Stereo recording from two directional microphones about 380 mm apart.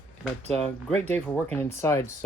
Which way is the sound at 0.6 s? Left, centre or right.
Centre.